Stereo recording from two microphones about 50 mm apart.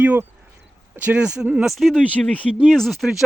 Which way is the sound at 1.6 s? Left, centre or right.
Centre.